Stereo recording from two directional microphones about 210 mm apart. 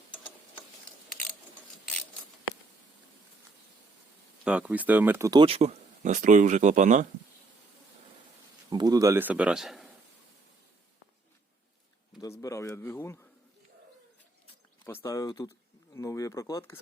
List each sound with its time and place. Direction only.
4.4 s speech: 5° right (ahead or behind); by 7.1 s 35° right (ahead or behind)
8.7 s speech: 20° right (ahead or behind); by 9.9 s centre (ahead or behind)
12.2 s speech: 15° left (ahead or behind)
15.0 s speech: 15° left (ahead or behind)